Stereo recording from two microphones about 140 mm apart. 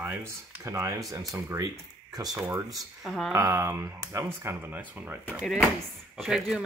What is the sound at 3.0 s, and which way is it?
Speech, centre (ahead or behind).